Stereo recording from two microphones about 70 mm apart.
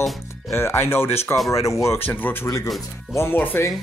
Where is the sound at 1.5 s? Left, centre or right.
Left.